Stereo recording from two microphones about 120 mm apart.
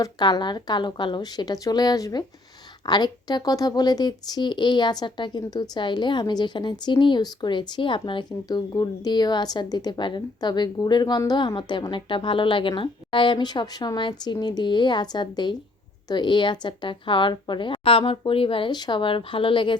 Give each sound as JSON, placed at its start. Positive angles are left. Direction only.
{"t": 0.0, "sound": "a woman's voice", "side_deg": 35}